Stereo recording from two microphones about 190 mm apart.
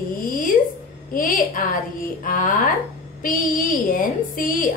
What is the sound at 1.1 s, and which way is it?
A woman's voice, 45° left (ahead or behind).